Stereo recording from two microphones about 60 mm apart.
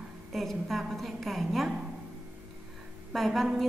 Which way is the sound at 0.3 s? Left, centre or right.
Centre.